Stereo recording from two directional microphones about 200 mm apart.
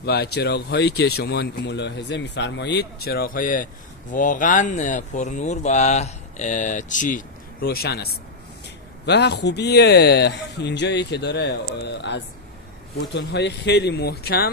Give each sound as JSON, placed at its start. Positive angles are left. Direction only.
{"t": 0.0, "sound": "speech", "side_deg": 55}